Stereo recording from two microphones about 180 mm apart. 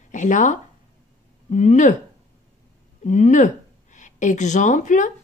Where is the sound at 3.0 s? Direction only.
40° left (ahead or behind).